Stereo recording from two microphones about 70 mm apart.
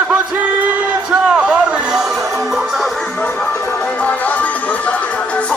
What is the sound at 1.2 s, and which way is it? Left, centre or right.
Music, centre.